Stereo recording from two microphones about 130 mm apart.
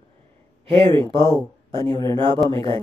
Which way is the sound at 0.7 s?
45° right (ahead or behind).